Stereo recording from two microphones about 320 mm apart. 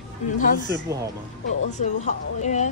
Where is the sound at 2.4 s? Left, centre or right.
Left.